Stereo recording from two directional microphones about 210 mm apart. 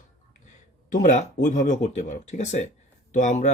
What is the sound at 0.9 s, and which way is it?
Speech, 35° left (ahead or behind).